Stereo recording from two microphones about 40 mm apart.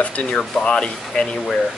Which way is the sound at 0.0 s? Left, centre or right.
Left.